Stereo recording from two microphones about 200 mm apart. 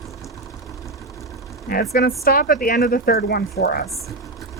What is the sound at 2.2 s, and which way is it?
Speech, 50° left (ahead or behind).